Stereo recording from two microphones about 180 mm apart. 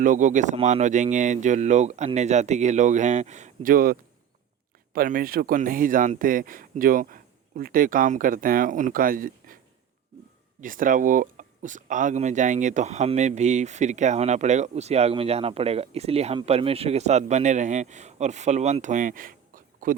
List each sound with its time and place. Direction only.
0.0 s speech: 45° right (ahead or behind)
4.9 s speech: 50° right (ahead or behind)
10.6 s speech: 50° right (ahead or behind)